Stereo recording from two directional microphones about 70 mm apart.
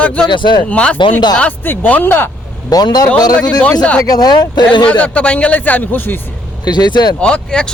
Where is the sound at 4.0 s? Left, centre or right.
Left.